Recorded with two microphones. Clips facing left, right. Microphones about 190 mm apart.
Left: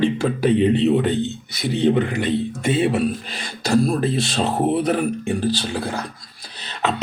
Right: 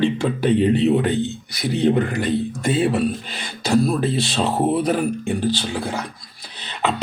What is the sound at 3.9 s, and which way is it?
Speech, centre (ahead or behind).